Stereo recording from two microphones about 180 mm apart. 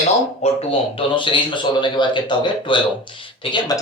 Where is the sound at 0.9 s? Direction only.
25° left (ahead or behind).